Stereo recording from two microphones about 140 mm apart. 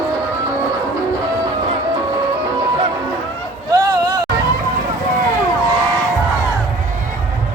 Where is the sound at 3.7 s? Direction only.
25° right (ahead or behind).